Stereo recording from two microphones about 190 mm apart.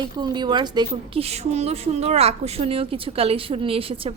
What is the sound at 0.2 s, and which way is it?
A woman's voice, 25° right (ahead or behind).